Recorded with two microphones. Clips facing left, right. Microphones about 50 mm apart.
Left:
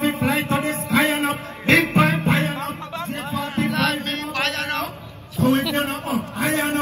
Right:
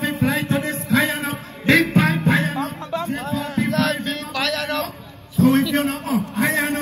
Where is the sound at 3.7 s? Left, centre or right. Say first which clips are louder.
Right 1 dB; left.